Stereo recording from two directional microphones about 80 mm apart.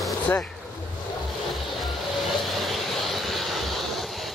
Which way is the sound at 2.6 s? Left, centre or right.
Centre.